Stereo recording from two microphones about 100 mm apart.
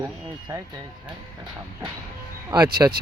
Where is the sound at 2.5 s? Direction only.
45° right (ahead or behind).